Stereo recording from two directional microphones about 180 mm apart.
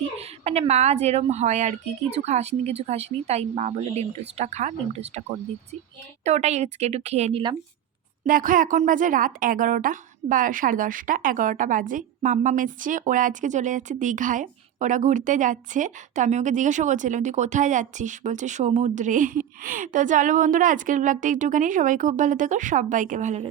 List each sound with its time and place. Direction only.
0.2 s a woman's voice: 35° right (ahead or behind)
6.2 s a woman's voice: 40° right (ahead or behind)
8.2 s a woman's voice: 50° right (ahead or behind)